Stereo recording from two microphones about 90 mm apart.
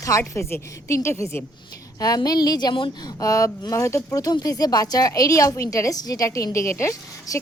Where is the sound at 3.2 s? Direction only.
40° left (ahead or behind).